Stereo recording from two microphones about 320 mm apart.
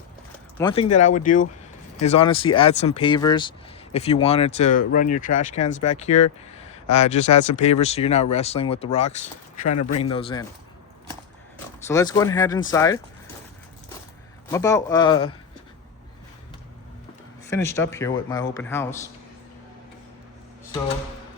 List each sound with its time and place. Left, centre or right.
0.6 s a man's voice: centre
11.9 s a man's voice: centre
14.5 s a man's voice: centre
17.5 s a man's voice: centre